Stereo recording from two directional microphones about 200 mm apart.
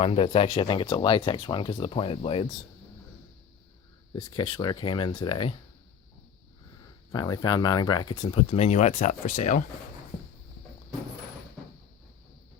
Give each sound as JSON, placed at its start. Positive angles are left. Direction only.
{"t": 0.0, "sound": "speech", "side_deg": 30}
{"t": 4.1, "sound": "speech", "side_deg": 25}
{"t": 7.1, "sound": "speech", "side_deg": 20}